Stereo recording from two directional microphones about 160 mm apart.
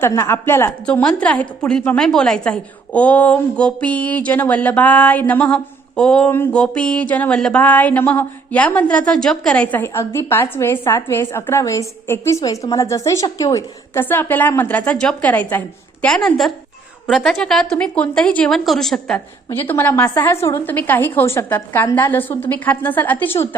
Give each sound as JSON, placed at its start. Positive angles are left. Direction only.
{"t": 0.0, "sound": "a woman's voice", "side_deg": 20}
{"t": 9.8, "sound": "a woman's voice", "side_deg": 15}